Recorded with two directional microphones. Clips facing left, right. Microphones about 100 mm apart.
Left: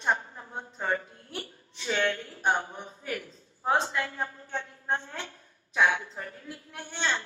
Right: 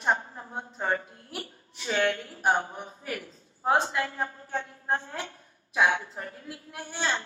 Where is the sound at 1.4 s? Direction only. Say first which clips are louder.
Even; 30° right (ahead or behind).